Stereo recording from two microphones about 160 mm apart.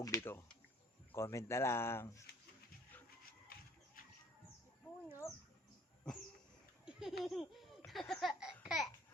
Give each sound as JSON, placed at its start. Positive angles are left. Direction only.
{"t": 0.0, "sound": "speech", "side_deg": 15}
{"t": 5.2, "sound": "bird", "side_deg": 15}
{"t": 6.8, "sound": "laughter", "side_deg": 0}
{"t": 8.6, "sound": "babbling", "side_deg": 0}